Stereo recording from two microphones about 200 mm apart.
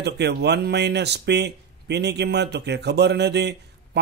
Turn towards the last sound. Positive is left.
turn(degrees=-55)  # may be behind; listen again after turning